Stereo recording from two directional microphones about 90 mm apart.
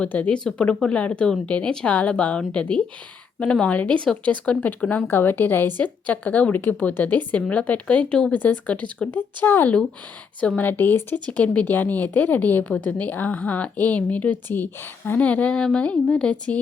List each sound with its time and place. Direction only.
0.0 s a woman's voice: 15° left (ahead or behind)